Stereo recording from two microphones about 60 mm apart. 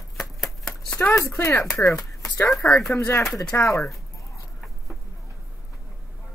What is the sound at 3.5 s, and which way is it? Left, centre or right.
Speech, left.